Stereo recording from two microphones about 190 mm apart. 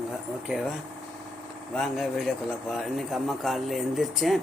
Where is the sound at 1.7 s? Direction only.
Centre (ahead or behind).